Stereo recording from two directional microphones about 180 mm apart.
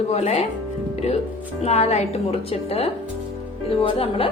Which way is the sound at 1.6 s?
35° left (ahead or behind).